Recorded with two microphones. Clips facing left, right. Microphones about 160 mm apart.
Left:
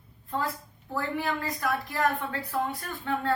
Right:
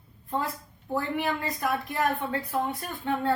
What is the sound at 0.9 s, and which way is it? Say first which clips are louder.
Speech: right 2 dB; 20° right (ahead or behind).